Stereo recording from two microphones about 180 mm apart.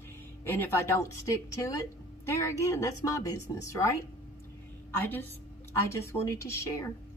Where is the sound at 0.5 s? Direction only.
15° left (ahead or behind).